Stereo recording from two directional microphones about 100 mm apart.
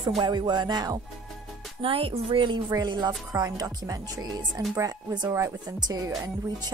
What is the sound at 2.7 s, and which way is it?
Speech, 45° right (ahead or behind).